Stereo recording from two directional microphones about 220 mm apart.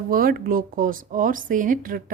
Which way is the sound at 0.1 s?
40° right (ahead or behind).